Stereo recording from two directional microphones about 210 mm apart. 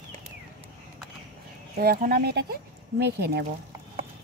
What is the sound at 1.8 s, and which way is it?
Speech, 45° right (ahead or behind).